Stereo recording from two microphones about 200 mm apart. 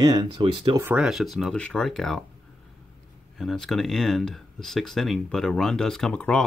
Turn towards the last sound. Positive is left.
turn(degrees=5)  # may be behind; listen again after turning